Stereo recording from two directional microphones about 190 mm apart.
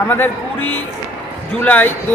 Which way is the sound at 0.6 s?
90° left.